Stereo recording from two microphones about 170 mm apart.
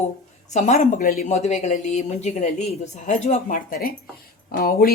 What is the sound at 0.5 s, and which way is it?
Speech, 45° left (ahead or behind).